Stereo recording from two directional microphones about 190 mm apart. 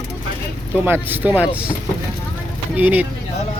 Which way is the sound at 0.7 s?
10° right (ahead or behind).